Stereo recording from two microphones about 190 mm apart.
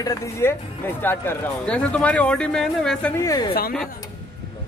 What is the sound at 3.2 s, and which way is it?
Speech, 20° left (ahead or behind).